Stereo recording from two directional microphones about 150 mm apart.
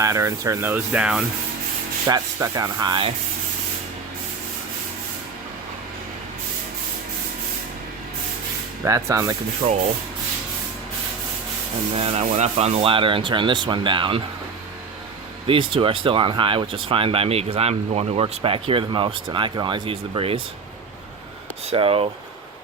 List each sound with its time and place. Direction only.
0.0 s speech: 20° right (ahead or behind)
2.0 s speech: 25° right (ahead or behind)
8.8 s speech: 20° right (ahead or behind)
9.6 s speech: 35° right (ahead or behind)
11.9 s speech: 45° right (ahead or behind)
15.4 s speech: 35° right (ahead or behind)
21.7 s speech: 40° right (ahead or behind)